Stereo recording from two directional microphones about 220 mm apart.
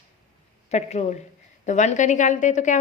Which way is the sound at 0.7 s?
30° left (ahead or behind).